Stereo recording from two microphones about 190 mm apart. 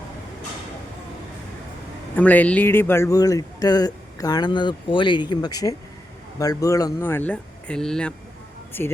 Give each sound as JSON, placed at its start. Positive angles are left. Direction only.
{"t": 2.1, "sound": "speech", "side_deg": 10}